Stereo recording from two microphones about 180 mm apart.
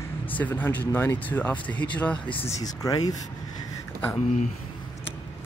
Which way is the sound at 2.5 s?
20° left (ahead or behind).